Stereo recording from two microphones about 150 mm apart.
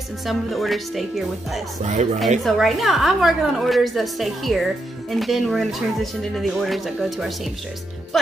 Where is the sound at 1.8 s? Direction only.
55° right (ahead or behind).